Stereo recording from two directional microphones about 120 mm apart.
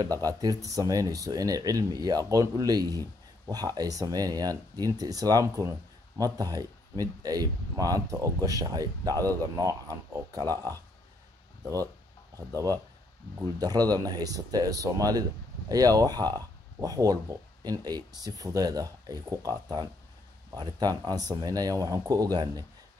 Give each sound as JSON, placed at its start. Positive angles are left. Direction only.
{"t": 0.0, "sound": "speech", "side_deg": -30}
{"t": 12.4, "sound": "speech", "side_deg": -30}